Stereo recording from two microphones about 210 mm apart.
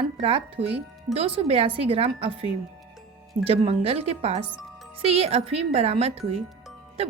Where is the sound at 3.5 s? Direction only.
30° right (ahead or behind).